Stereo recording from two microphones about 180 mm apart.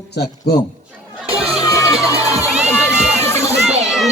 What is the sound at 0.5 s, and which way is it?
Speech, 65° left (ahead or behind).